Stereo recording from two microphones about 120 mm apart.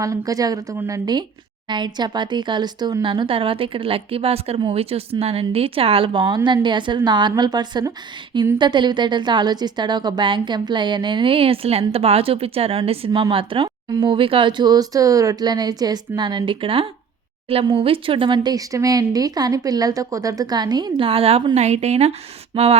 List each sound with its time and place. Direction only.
0.0 s a woman's voice: 30° right (ahead or behind); by 21.4 s 55° right (ahead or behind)
21.5 s a woman's voice: 65° right (ahead or behind)